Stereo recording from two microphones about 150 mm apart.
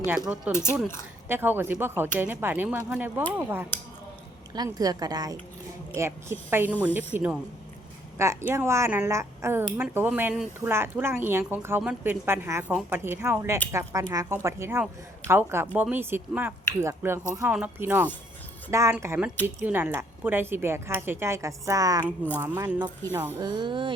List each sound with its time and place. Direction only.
0.5 s a woman's voice: 15° left (ahead or behind)
1.3 s a woman's voice: 15° right (ahead or behind)
4.5 s a woman's voice: 25° right (ahead or behind)
22.0 s a woman's voice: 15° left (ahead or behind)
22.4 s a woman's voice: 15° right (ahead or behind)
23.4 s speech: 30° right (ahead or behind)